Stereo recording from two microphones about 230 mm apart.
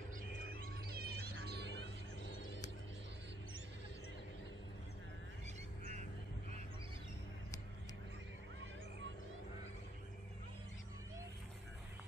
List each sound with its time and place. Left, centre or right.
1.0 s music: right